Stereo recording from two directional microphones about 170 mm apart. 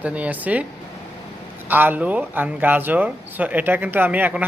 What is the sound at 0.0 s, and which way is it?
Speech, 10° right (ahead or behind).